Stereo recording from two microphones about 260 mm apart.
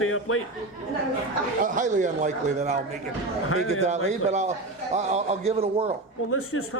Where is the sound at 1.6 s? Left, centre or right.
Right.